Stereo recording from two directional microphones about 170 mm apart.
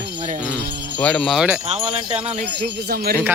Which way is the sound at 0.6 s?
90° right.